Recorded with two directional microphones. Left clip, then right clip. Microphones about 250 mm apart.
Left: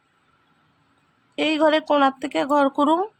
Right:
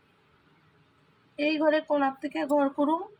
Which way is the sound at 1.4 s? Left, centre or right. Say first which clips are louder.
Left 6 dB; left.